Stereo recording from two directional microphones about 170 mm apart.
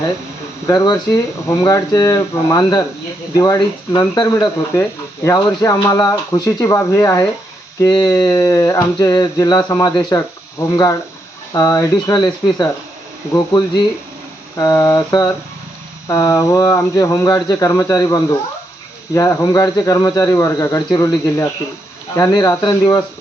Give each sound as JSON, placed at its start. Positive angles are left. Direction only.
{"t": 0.7, "sound": "speech", "side_deg": 25}